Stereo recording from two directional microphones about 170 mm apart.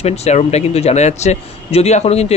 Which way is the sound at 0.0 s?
40° left (ahead or behind).